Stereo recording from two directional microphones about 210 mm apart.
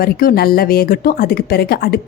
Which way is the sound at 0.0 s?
45° left (ahead or behind).